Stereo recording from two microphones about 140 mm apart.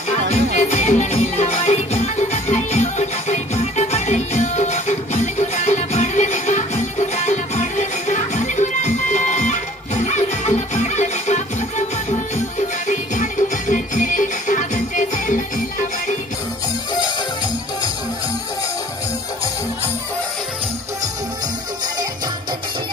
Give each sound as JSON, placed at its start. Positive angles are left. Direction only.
{"t": 0.3, "sound": "music", "side_deg": 55}